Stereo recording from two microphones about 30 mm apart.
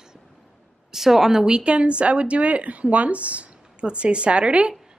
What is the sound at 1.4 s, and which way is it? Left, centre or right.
A woman's voice, right.